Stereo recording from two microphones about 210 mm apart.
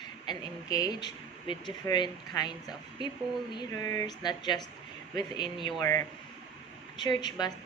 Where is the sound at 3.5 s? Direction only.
15° left (ahead or behind).